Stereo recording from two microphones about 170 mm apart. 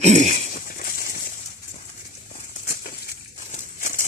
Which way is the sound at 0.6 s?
60° left (ahead or behind).